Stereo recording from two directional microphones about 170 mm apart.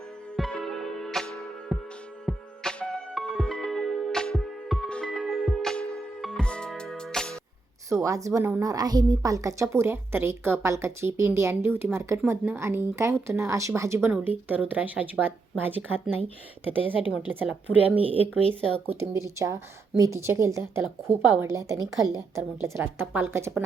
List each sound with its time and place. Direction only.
0.3 s music: centre (ahead or behind)
2.3 s music: 10° right (ahead or behind)
2.6 s music: 5° left (ahead or behind)
7.9 s a woman's voice: 20° right (ahead or behind)
17.1 s a woman's voice: 10° right (ahead or behind)
17.9 s speech: 30° right (ahead or behind)
18.9 s a woman's voice: 15° right (ahead or behind)